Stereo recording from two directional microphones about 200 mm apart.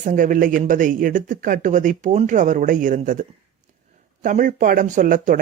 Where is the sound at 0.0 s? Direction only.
40° right (ahead or behind).